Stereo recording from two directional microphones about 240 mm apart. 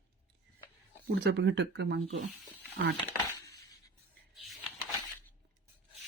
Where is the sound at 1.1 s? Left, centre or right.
Right.